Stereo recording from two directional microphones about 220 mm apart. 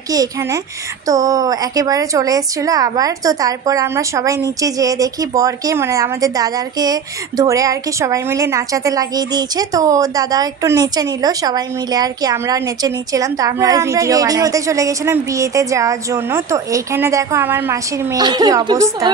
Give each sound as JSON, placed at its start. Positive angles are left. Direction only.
{"t": 0.1, "sound": "a woman's voice", "side_deg": -15}